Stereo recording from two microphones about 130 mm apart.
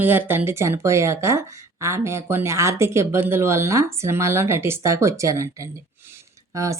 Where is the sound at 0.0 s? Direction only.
15° right (ahead or behind).